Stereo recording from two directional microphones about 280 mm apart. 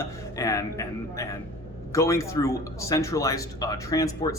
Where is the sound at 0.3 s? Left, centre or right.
Centre.